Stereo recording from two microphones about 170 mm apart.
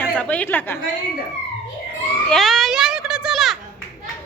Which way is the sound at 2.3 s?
Centre (ahead or behind).